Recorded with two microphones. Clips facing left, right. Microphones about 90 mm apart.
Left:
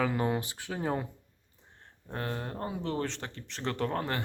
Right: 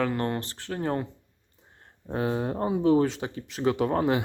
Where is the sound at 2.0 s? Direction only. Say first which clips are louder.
Right 9 dB; 15° right (ahead or behind).